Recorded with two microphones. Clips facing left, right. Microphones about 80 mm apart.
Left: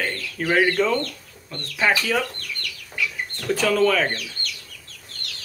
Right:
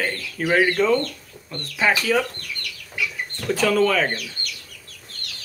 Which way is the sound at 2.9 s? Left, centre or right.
Centre.